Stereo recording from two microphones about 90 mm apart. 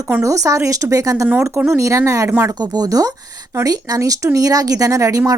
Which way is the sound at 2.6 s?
50° right (ahead or behind).